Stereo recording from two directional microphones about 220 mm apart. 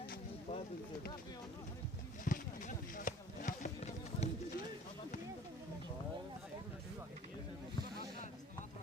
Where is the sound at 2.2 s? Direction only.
35° left (ahead or behind).